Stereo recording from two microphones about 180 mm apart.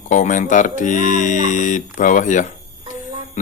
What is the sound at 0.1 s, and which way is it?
A man's voice, 45° left (ahead or behind).